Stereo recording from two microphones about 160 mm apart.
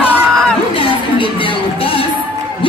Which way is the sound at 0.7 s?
35° left (ahead or behind).